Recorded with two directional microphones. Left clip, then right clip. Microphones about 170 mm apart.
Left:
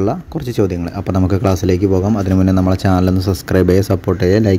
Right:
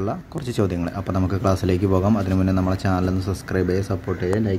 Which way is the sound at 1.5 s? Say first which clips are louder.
Left 6 dB; 15° left (ahead or behind).